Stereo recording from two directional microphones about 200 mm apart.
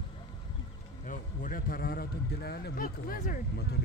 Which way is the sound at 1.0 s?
45° left (ahead or behind).